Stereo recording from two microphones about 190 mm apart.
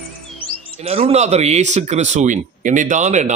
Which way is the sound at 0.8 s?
30° right (ahead or behind).